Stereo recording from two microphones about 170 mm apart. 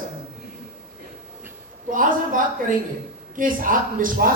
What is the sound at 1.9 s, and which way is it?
A woman's voice, 50° right (ahead or behind).